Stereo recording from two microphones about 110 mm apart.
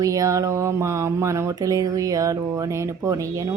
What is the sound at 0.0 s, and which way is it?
Speech, 30° right (ahead or behind).